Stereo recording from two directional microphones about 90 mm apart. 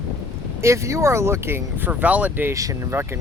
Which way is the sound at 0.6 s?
35° right (ahead or behind).